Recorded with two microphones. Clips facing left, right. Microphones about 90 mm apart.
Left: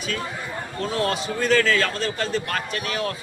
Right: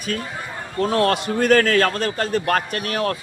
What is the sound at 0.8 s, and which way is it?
A man's voice, 55° right (ahead or behind).